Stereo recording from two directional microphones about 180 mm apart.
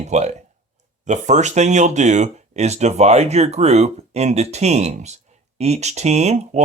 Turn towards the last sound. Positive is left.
turn(degrees=-40)  # may be behind; listen again after turning